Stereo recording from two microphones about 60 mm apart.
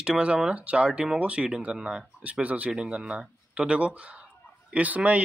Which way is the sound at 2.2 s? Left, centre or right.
Right.